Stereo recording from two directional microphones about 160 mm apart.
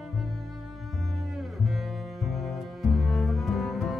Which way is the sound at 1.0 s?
Centre (ahead or behind).